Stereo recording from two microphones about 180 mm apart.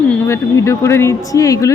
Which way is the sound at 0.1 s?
15° left (ahead or behind).